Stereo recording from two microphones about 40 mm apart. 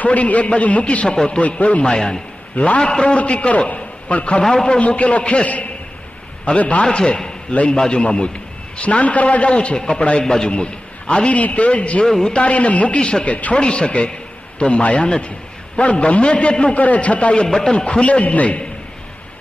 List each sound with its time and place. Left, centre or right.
0.0 s a man's voice: left
1.0 s a man's voice: centre
1.4 s a man's voice: left
1.9 s a man's voice: left
3.2 s a man's voice: left
4.4 s a man's voice: centre
4.7 s a man's voice: left
13.3 s a man's voice: left
13.6 s a man's voice: left
16.7 s a man's voice: left
17.5 s a man's voice: centre
17.7 s a man's voice: left
18.2 s a man's voice: left